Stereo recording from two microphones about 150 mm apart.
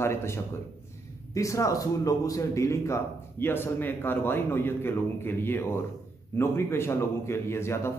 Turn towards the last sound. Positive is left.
turn(degrees=15)  # may be behind; listen again after turning